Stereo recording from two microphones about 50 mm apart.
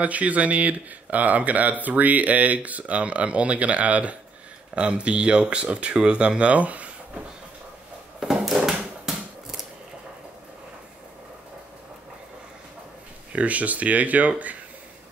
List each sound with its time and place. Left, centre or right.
0.0 s speech: right
8.2 s a sound: centre
13.3 s speech: right